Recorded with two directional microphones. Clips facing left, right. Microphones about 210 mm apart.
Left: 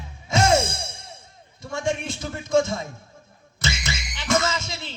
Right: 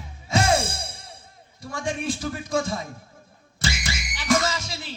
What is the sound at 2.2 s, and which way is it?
Speech, 25° left (ahead or behind).